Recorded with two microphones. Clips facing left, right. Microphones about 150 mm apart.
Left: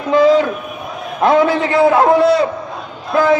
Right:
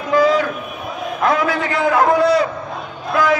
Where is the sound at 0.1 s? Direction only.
25° left (ahead or behind).